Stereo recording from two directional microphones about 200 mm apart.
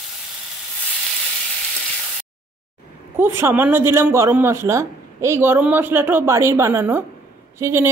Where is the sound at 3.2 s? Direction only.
10° right (ahead or behind).